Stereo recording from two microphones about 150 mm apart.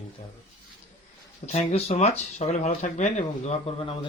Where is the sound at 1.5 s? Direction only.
45° left (ahead or behind).